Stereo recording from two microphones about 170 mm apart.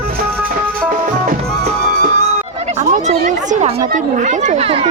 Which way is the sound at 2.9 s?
45° right (ahead or behind).